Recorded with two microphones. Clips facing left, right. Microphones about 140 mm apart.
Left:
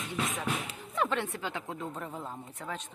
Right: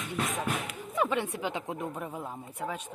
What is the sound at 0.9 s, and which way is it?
A woman's voice, 10° right (ahead or behind).